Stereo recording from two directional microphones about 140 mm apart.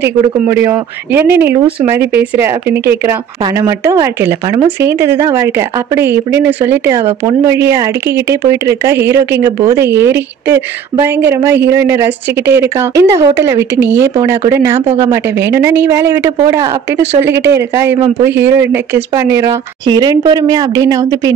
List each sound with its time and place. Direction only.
0.0 s speech: 15° right (ahead or behind)